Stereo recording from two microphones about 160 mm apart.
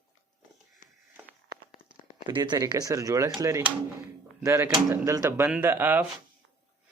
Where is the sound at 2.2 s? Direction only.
30° right (ahead or behind); by 6.1 s 10° right (ahead or behind).